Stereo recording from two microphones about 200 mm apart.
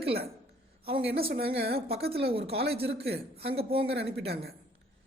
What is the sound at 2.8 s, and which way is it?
Speech, 55° right (ahead or behind).